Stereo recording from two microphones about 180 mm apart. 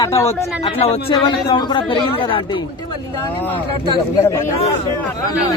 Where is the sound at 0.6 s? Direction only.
30° left (ahead or behind).